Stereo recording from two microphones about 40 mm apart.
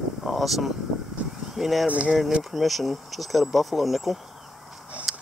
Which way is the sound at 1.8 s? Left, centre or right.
Right.